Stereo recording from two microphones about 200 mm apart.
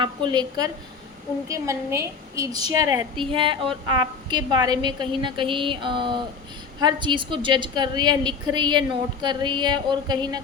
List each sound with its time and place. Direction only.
0.0 s a woman's voice: 25° right (ahead or behind)